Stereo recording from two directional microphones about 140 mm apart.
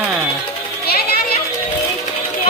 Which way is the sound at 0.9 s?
90° left.